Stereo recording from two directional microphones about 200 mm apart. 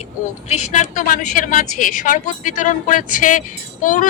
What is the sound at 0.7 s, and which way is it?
A woman's voice, 40° left (ahead or behind).